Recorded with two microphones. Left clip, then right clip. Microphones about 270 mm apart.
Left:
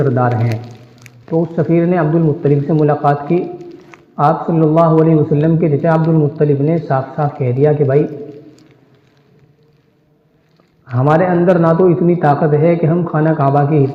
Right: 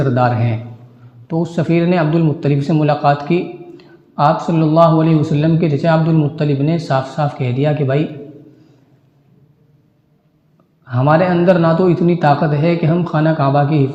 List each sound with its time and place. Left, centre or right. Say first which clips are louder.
0.0 s a man's voice: even; right
10.8 s a man's voice: left 1 dB; right